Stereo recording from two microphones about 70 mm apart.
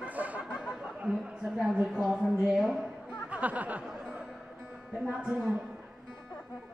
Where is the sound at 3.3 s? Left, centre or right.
Right.